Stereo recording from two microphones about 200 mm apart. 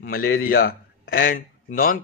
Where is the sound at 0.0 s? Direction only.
45° left (ahead or behind).